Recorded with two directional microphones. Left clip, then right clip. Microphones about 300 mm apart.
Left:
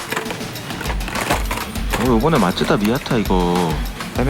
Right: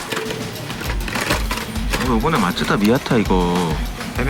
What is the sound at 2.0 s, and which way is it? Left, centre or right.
Speech, centre.